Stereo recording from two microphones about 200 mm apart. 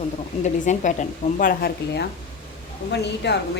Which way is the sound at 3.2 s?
60° left (ahead or behind).